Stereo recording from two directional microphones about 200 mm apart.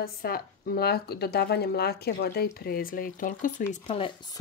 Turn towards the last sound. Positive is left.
turn(degrees=20)  # may be behind; listen again after turning